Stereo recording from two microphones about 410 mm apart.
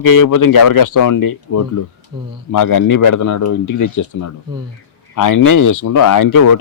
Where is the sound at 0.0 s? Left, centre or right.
Left.